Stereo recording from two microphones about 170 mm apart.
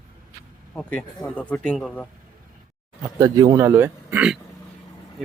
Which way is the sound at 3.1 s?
20° right (ahead or behind).